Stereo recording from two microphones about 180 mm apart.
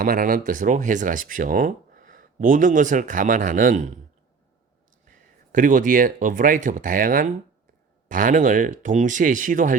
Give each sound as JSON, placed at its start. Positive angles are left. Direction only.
{"t": 0.0, "sound": "speech", "side_deg": -50}
{"t": 5.0, "sound": "speech", "side_deg": -45}